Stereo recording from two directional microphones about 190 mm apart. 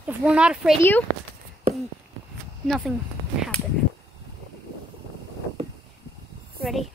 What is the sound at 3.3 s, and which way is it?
Whip, centre (ahead or behind).